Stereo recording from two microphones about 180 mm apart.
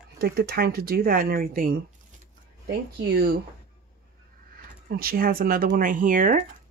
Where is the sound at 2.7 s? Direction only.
65° right (ahead or behind).